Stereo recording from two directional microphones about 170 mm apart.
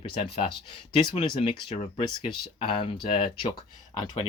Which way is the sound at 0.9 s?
30° left (ahead or behind).